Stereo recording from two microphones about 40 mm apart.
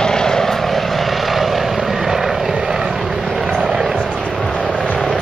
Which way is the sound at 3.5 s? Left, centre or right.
Centre.